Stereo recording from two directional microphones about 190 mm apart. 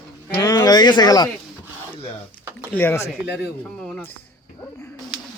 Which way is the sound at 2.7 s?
10° left (ahead or behind).